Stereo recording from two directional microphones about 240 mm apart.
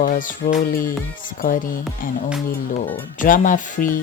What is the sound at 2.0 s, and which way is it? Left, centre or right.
Speech, left.